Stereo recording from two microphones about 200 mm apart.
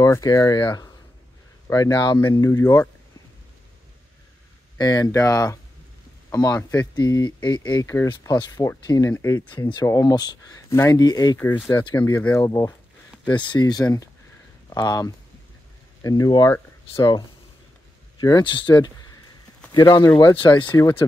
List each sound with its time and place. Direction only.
0.0 s speech: 15° left (ahead or behind)
4.7 s speech: 20° left (ahead or behind)
18.2 s speech: 20° left (ahead or behind)